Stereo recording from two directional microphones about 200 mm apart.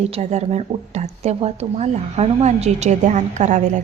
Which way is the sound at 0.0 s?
35° right (ahead or behind).